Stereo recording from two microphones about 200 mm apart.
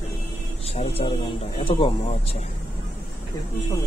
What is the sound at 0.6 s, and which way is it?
Speech, 30° left (ahead or behind).